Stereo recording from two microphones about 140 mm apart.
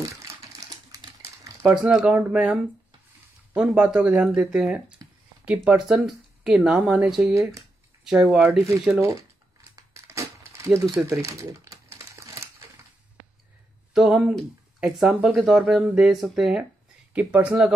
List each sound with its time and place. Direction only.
0.0 s crumpling: 20° right (ahead or behind)
1.8 s speech: 5° right (ahead or behind)
9.8 s crumpling: 20° right (ahead or behind)
13.9 s speech: 5° right (ahead or behind)